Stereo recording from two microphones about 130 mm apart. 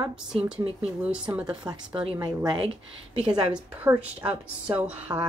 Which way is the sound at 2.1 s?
35° right (ahead or behind).